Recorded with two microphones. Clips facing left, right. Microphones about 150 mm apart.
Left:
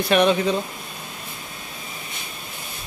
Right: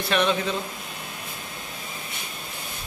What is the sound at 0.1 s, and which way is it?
Speech, 15° left (ahead or behind).